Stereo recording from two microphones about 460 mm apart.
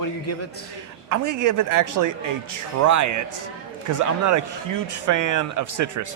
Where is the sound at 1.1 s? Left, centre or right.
Right.